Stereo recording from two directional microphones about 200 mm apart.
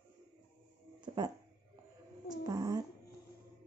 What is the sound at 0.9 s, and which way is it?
Music, 20° right (ahead or behind).